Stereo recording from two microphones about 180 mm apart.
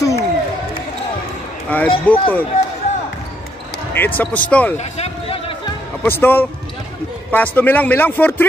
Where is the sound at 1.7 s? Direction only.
10° left (ahead or behind).